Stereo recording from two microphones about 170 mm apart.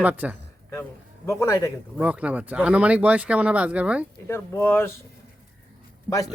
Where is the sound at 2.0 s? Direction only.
10° right (ahead or behind).